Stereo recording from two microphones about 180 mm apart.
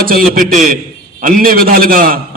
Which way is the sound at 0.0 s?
55° right (ahead or behind).